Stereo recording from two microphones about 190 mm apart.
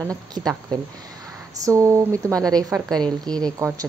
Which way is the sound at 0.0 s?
20° right (ahead or behind).